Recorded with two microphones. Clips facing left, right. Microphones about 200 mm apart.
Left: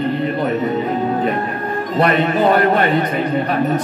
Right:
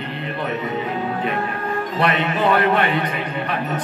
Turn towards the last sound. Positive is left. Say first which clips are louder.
# left 4 dB
turn(degrees=40)  # may be behind; listen again after turning